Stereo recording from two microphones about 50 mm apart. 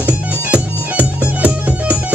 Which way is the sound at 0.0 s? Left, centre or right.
Right.